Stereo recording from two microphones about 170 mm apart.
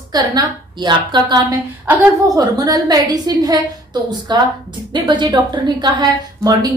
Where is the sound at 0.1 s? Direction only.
25° right (ahead or behind).